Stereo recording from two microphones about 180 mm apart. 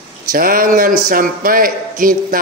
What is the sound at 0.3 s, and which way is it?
A man's voice, 50° right (ahead or behind).